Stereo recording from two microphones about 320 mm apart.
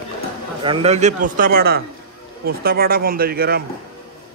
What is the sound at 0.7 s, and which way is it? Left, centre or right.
Speech, centre.